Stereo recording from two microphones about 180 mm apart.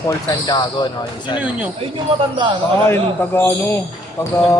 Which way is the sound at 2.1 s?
30° right (ahead or behind).